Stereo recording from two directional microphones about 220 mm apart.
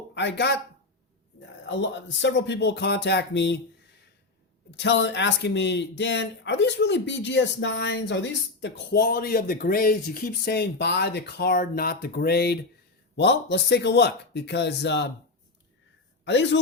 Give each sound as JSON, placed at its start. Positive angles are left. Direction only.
{"t": 0.1, "sound": "speech", "side_deg": 50}
{"t": 1.6, "sound": "speech", "side_deg": 55}
{"t": 4.8, "sound": "speech", "side_deg": 55}
{"t": 16.2, "sound": "speech", "side_deg": 55}